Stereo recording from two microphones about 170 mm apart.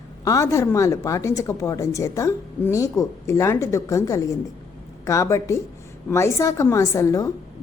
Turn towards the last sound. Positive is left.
turn(degrees=20)  # may be behind; listen again after turning